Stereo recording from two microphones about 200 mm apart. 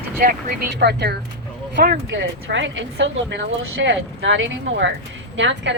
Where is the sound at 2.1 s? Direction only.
65° right (ahead or behind).